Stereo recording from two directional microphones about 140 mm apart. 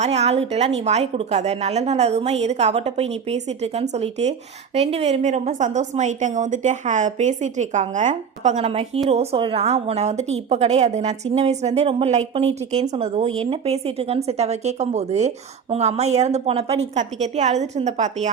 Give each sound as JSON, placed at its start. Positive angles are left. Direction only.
{"t": 0.0, "sound": "a woman's voice", "side_deg": -50}